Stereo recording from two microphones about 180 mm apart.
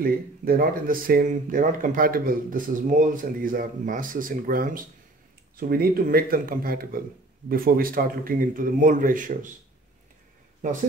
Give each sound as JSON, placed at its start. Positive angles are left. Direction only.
{"t": 0.0, "sound": "speech", "side_deg": -55}
{"t": 10.6, "sound": "speech", "side_deg": -45}